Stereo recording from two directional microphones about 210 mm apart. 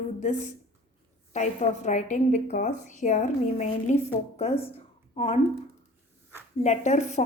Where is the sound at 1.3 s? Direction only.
35° left (ahead or behind).